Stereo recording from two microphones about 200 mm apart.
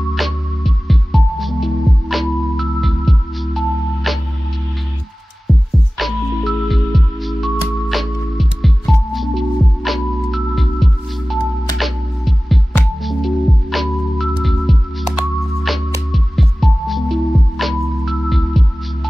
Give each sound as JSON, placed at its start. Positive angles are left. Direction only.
{"t": 0.1, "sound": "music", "side_deg": 0}
{"t": 5.9, "sound": "music", "side_deg": 0}